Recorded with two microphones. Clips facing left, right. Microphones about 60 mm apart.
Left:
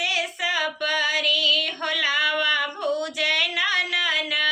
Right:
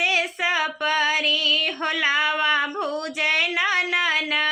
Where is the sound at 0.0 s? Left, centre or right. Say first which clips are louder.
Right 3 dB; right.